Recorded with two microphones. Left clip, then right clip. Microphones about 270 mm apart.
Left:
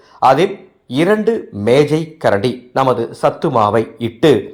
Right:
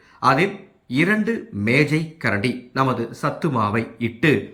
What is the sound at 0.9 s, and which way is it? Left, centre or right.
Speech, centre.